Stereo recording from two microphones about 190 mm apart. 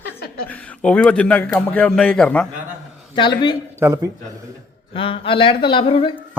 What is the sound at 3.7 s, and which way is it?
Speech, 15° right (ahead or behind).